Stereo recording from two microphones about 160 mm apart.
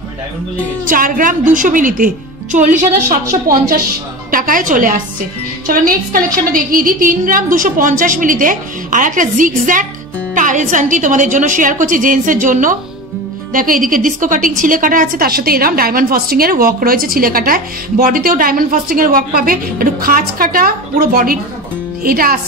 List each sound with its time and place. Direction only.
0.8 s a woman's voice: 60° right (ahead or behind)
3.4 s a woman's voice: 65° right (ahead or behind)